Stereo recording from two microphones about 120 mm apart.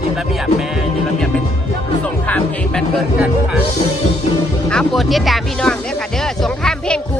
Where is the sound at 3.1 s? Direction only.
10° right (ahead or behind).